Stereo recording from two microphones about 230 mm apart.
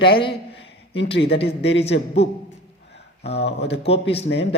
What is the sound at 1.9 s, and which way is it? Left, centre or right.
Speech, left.